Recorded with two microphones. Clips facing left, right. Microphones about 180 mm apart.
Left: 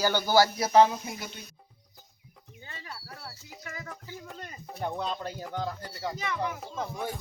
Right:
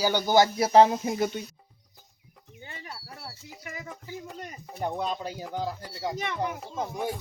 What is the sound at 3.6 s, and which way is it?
Speech, 15° right (ahead or behind).